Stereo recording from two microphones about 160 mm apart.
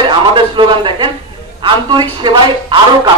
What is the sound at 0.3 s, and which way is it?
A man's voice, 30° right (ahead or behind).